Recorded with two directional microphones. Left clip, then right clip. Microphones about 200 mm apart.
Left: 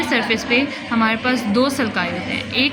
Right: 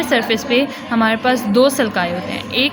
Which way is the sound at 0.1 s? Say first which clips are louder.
Right 3 dB; 50° right (ahead or behind).